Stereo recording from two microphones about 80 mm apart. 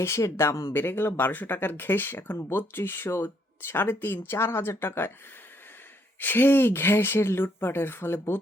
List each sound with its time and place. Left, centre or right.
0.0 s speech: left
6.1 s speech: left